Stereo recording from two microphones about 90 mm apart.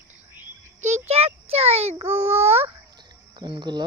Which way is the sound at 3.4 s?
60° right (ahead or behind).